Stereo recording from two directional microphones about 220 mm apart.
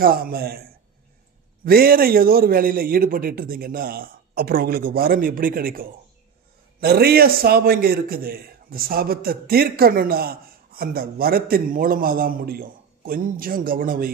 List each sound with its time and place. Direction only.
0.0 s a man's voice: 40° right (ahead or behind)